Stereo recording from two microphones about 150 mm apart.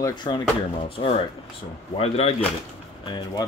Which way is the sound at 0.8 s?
40° left (ahead or behind).